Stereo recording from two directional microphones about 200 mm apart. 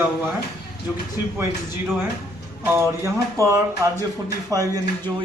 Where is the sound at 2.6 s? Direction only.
15° right (ahead or behind).